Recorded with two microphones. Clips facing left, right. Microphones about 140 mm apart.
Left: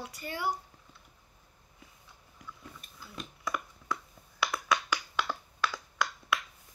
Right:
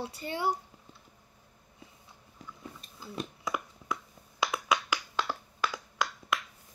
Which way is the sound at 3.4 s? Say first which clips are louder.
Right 1 dB; 20° right (ahead or behind).